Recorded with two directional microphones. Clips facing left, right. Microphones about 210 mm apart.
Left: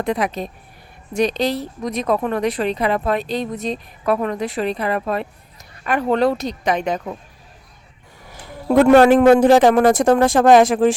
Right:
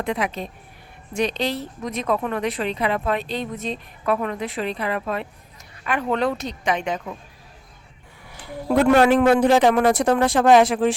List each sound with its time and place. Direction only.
0.0 s speech: 40° left (ahead or behind)
8.8 s a man's voice: 45° left (ahead or behind)